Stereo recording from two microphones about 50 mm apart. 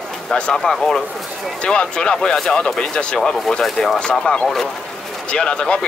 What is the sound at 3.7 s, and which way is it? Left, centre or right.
Speech, centre.